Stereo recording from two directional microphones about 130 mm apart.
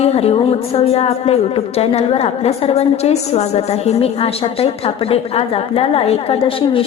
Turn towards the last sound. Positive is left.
turn(degrees=45)  # may be behind; listen again after turning